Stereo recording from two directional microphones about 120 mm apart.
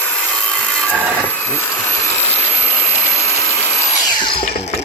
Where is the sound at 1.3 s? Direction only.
15° left (ahead or behind).